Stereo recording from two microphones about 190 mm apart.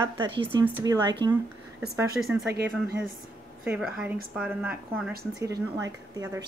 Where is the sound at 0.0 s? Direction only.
25° right (ahead or behind).